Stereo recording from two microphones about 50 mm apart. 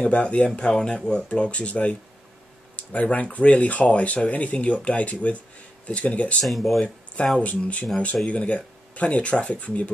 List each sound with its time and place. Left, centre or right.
0.0 s speech: left
6.4 s speech: centre
7.4 s speech: left